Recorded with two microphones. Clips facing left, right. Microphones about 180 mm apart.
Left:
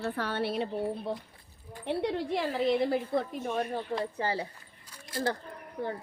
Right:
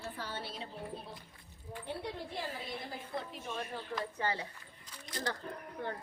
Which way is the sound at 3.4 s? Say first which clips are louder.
Left 9 dB; 50° left (ahead or behind).